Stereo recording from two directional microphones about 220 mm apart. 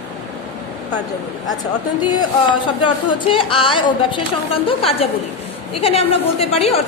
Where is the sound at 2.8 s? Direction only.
25° left (ahead or behind).